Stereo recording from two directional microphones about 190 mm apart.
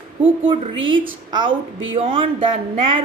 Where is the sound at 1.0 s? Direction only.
25° right (ahead or behind).